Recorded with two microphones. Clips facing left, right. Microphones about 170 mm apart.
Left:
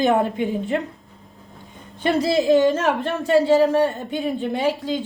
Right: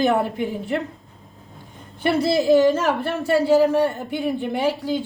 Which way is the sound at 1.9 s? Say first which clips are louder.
Even; 10° right (ahead or behind).